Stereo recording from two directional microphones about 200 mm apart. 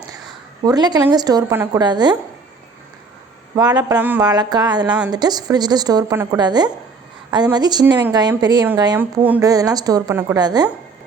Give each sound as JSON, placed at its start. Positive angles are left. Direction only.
{"t": 0.6, "sound": "a woman's voice", "side_deg": -20}
{"t": 3.5, "sound": "a woman's voice", "side_deg": -20}
{"t": 3.9, "sound": "speech", "side_deg": -10}
{"t": 4.3, "sound": "a woman's voice", "side_deg": -20}
{"t": 4.9, "sound": "speech", "side_deg": -5}
{"t": 5.1, "sound": "a woman's voice", "side_deg": -20}